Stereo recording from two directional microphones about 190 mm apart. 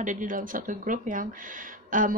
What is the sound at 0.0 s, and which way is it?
Speech, 40° right (ahead or behind).